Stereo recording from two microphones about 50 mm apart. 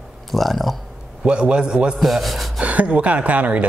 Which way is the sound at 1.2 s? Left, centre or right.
Right.